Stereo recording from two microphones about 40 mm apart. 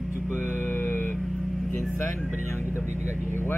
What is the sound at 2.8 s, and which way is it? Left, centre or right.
Speech, left.